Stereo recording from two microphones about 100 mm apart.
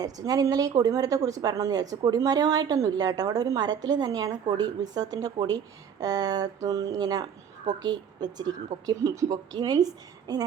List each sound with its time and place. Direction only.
0.0 s a woman's voice: 35° right (ahead or behind)